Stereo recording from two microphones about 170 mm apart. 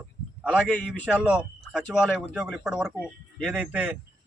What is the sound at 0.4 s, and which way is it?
A man's voice, 5° right (ahead or behind).